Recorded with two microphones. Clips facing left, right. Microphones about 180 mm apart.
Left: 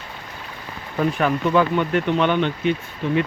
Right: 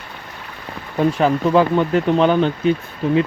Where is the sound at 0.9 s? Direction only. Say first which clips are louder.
Right 4 dB; 30° right (ahead or behind).